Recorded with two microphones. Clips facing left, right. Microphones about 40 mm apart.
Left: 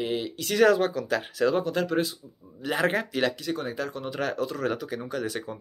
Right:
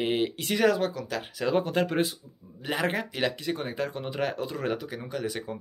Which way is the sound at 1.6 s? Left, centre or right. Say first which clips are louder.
Even; right.